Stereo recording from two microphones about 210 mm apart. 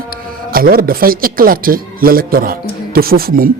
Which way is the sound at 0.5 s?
45° right (ahead or behind).